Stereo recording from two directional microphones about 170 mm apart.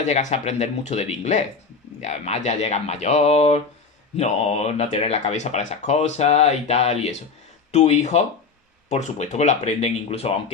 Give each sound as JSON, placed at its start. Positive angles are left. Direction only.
{"t": 0.0, "sound": "speech", "side_deg": 45}